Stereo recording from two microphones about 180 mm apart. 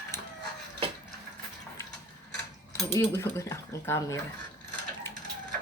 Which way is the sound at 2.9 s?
15° left (ahead or behind).